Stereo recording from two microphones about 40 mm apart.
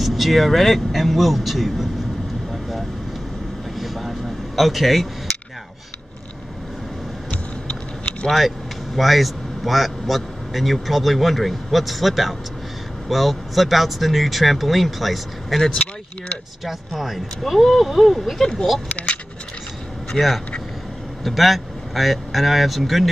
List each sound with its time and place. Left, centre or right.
0.0 s speech: centre
3.7 s a sound: centre
8.3 s speech: centre
16.6 s speech: centre
18.4 s speech: centre
20.2 s speech: centre